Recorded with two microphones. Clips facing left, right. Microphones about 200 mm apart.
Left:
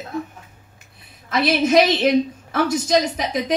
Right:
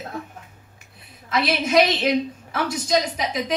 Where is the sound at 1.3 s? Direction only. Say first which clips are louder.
Left 4 dB; 50° left (ahead or behind).